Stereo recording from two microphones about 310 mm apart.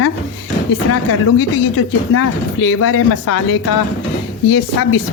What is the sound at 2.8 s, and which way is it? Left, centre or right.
Speech, left.